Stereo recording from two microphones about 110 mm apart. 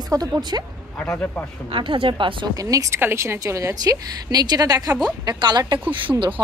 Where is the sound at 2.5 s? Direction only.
30° right (ahead or behind).